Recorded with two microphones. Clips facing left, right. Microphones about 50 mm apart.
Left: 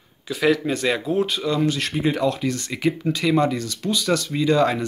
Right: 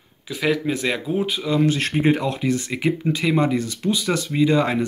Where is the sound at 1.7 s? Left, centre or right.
Right.